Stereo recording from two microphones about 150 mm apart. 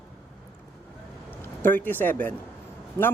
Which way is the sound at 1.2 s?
15° left (ahead or behind).